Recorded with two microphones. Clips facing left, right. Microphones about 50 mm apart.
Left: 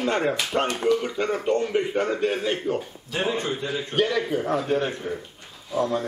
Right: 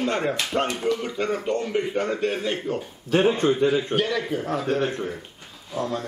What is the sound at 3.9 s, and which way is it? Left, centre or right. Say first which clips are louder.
Speech: left 1 dB; centre.